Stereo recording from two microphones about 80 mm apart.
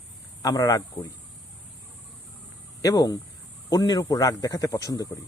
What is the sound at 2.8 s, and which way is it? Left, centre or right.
Speech, left.